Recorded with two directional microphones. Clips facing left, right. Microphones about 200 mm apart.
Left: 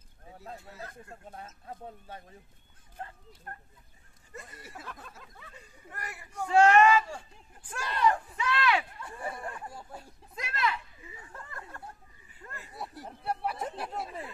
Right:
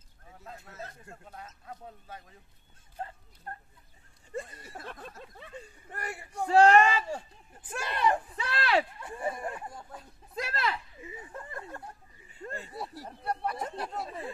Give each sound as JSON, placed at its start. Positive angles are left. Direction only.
{"t": 0.3, "sound": "a sound", "side_deg": 35}
{"t": 1.3, "sound": "speech", "side_deg": 30}
{"t": 4.3, "sound": "speech", "side_deg": -30}
{"t": 8.4, "sound": "speech", "side_deg": -35}
{"t": 9.0, "sound": "speech", "side_deg": -25}
{"t": 10.3, "sound": "speech", "side_deg": -35}
{"t": 11.0, "sound": "speech", "side_deg": -20}
{"t": 12.3, "sound": "a sound", "side_deg": -30}
{"t": 12.7, "sound": "speech", "side_deg": 0}